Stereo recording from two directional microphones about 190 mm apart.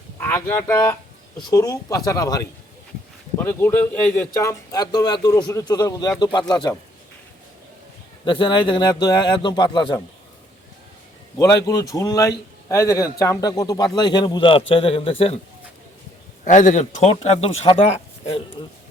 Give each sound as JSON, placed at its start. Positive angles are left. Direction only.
{"t": 0.2, "sound": "a man's voice", "side_deg": 15}
{"t": 8.2, "sound": "a man's voice", "side_deg": 25}
{"t": 11.3, "sound": "a man's voice", "side_deg": 15}
{"t": 16.4, "sound": "speech", "side_deg": 40}